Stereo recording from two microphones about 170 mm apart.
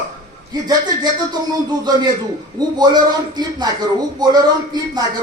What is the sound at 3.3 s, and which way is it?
Speech, 25° right (ahead or behind).